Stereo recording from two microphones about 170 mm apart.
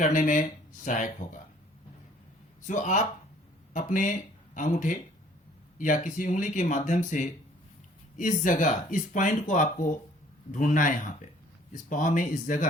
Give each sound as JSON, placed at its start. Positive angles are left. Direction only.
{"t": 0.0, "sound": "speech", "side_deg": 50}
{"t": 2.6, "sound": "speech", "side_deg": 45}